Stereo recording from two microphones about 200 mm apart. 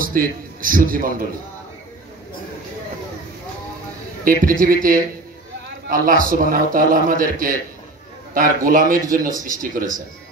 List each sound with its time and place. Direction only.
0.0 s a man's voice: 45° right (ahead or behind)
4.2 s a man's voice: 45° right (ahead or behind)